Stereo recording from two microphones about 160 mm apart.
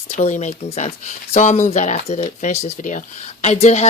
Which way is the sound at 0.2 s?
45° left (ahead or behind).